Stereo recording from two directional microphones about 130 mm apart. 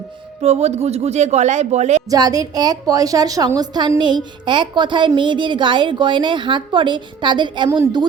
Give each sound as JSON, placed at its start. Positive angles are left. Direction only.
{"t": 0.4, "sound": "speech", "side_deg": -55}
{"t": 2.0, "sound": "a woman's voice", "side_deg": -30}